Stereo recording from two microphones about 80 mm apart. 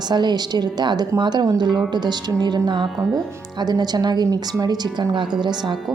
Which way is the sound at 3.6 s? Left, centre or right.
Right.